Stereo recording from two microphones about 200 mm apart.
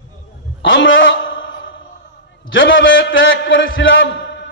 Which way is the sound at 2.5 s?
70° left (ahead or behind).